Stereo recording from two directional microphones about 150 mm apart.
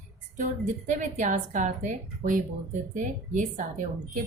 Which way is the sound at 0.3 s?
55° right (ahead or behind).